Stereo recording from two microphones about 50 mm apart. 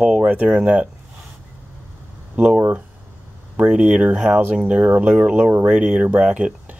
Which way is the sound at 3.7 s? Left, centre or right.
Right.